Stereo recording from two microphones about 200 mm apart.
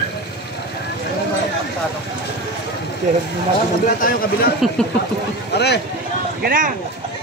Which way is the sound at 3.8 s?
45° left (ahead or behind).